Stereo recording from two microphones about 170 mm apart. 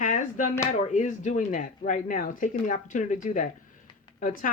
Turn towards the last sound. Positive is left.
turn(degrees=55)  # may be behind; listen again after turning